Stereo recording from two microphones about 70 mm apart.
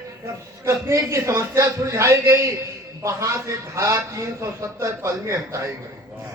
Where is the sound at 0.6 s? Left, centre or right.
Right.